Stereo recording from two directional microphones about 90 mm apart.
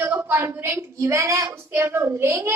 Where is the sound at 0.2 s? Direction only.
25° right (ahead or behind).